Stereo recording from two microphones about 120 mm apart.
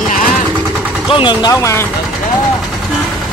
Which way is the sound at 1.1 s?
40° left (ahead or behind).